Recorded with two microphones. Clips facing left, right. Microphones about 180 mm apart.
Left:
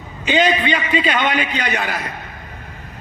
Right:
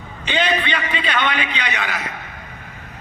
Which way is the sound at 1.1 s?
45° left (ahead or behind).